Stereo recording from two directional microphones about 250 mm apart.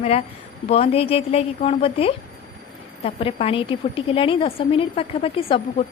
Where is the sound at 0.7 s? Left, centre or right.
Left.